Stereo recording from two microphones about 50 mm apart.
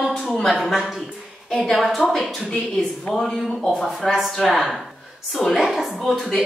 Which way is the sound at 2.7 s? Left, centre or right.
Centre.